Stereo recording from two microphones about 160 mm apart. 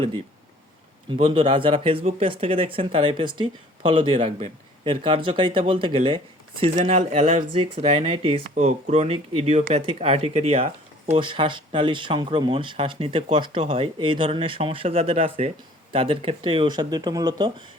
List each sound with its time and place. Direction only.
1.2 s speech: 35° right (ahead or behind)
6.7 s speech: 45° right (ahead or behind); by 17.5 s 25° right (ahead or behind)